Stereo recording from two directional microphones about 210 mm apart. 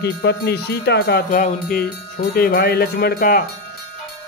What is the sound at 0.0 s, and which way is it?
Speech, 50° left (ahead or behind).